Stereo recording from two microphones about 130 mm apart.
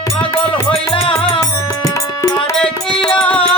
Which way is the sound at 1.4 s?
25° left (ahead or behind).